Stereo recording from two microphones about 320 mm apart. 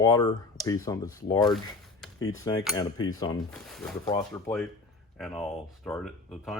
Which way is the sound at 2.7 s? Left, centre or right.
Centre.